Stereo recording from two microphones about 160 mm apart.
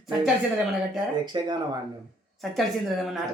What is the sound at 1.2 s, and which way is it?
Speech, 25° right (ahead or behind).